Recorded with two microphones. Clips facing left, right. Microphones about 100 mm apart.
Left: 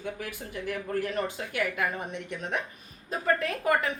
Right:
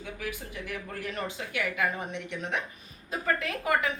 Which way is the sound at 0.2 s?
45° left (ahead or behind).